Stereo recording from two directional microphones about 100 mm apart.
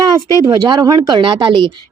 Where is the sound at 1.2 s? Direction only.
55° right (ahead or behind).